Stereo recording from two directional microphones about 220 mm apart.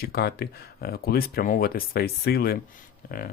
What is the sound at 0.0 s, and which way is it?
Speech, 45° left (ahead or behind).